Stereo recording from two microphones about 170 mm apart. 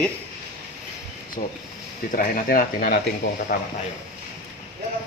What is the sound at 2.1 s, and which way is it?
Speech, 55° left (ahead or behind).